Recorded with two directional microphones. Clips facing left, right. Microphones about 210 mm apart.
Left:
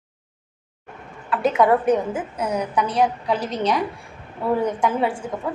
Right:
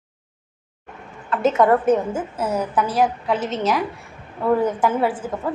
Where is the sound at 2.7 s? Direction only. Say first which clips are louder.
Even; 5° right (ahead or behind).